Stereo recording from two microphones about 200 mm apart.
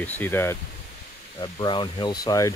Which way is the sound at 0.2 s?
10° left (ahead or behind).